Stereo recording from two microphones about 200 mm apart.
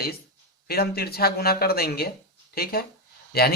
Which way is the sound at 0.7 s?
50° left (ahead or behind).